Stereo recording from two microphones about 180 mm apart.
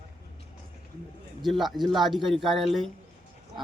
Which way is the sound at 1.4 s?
Centre (ahead or behind).